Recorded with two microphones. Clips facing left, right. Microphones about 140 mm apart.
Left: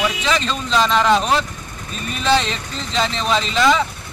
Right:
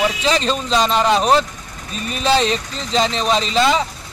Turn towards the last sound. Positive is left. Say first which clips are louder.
# right 1 dB
turn(degrees=-35)  # may be behind; listen again after turning